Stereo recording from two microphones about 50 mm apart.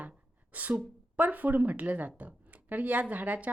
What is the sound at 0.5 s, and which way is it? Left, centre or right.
Speech, right.